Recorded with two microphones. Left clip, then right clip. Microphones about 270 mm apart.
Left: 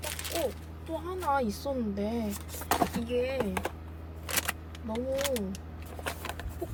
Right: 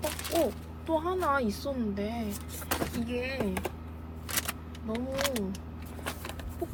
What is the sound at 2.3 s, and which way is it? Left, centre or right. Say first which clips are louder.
Speech: left 4 dB; left.